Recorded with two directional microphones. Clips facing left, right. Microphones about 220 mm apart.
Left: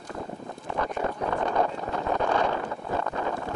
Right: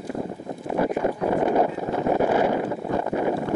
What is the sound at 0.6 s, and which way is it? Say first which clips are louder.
Wind noise: right 7 dB; 10° right (ahead or behind).